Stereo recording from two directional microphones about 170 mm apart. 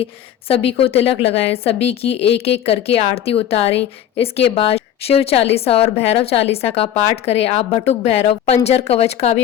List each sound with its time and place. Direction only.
0.0 s a woman's voice: 35° left (ahead or behind)